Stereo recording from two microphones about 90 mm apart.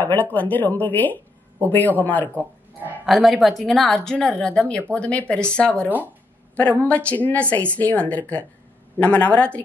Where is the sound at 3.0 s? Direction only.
Centre (ahead or behind).